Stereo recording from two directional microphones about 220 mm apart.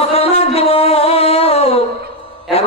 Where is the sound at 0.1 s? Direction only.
25° left (ahead or behind).